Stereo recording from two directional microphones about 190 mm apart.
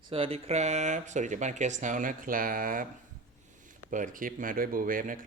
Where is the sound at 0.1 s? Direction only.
30° right (ahead or behind); by 2.8 s 50° right (ahead or behind).